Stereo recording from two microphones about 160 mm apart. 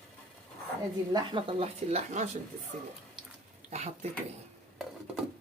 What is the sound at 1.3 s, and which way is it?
Speech, 35° right (ahead or behind).